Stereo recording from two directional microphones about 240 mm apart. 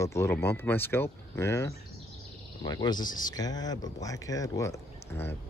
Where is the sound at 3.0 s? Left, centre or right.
Left.